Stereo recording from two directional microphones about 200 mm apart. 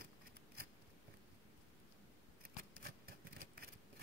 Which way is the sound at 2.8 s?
50° right (ahead or behind).